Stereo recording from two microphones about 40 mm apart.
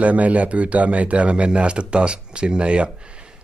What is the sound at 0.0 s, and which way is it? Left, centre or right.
Speech, right.